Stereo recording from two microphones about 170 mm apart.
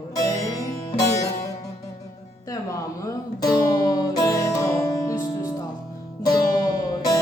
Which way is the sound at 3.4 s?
25° left (ahead or behind).